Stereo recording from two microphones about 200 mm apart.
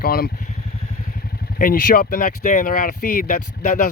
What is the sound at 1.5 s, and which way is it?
Speech, 45° left (ahead or behind).